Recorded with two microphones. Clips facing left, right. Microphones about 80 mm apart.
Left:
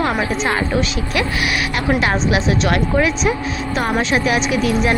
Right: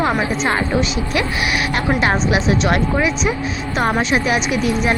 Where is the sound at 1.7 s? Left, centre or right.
Right.